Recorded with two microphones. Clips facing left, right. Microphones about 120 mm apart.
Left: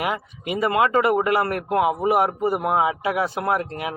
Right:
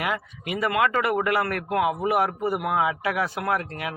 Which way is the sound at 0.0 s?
25° left (ahead or behind).